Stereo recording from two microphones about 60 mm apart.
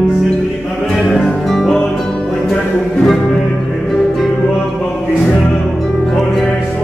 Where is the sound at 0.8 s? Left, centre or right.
Centre.